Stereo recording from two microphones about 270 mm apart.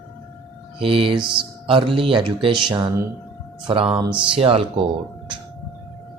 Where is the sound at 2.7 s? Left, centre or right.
Centre.